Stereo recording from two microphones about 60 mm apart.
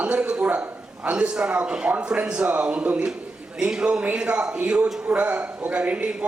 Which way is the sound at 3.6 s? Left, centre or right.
Centre.